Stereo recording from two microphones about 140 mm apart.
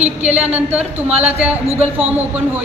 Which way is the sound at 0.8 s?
45° right (ahead or behind).